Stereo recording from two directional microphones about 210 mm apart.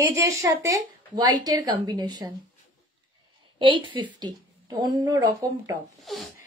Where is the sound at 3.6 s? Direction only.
20° right (ahead or behind).